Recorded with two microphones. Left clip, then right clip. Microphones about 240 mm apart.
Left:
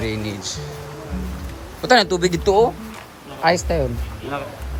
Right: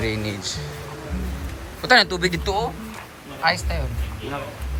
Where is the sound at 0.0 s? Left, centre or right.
Centre.